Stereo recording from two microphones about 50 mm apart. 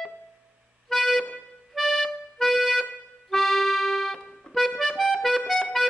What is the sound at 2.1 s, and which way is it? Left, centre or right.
Accordion, centre.